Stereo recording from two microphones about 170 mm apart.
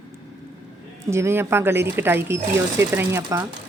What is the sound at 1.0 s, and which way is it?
Speech, 15° right (ahead or behind).